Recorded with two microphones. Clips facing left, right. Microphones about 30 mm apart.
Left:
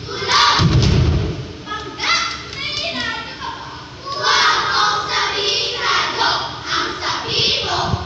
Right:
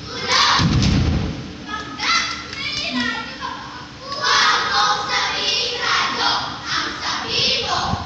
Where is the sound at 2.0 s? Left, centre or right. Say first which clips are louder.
Left 1 dB; left.